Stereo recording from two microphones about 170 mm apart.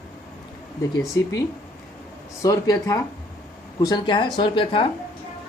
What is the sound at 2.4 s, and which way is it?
Speech, 20° left (ahead or behind).